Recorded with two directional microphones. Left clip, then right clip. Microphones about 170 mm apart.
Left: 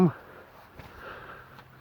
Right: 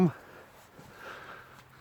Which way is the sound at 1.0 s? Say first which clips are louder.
Left 1 dB; 20° right (ahead or behind).